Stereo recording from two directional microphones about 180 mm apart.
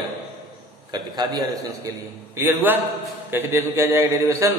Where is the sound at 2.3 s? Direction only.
15° right (ahead or behind).